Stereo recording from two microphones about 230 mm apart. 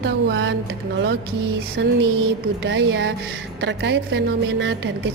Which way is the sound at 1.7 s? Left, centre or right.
Right.